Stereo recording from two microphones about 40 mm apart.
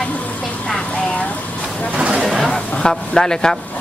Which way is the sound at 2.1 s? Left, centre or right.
Centre.